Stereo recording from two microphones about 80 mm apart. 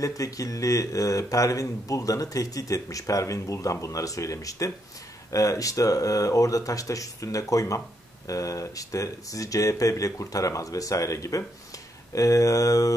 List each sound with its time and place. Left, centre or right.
0.0 s a man's voice: left